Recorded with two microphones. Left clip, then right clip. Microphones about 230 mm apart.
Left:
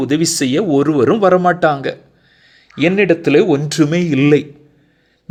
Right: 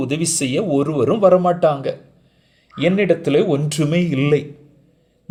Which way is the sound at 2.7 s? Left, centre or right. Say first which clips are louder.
Left 4 dB; left.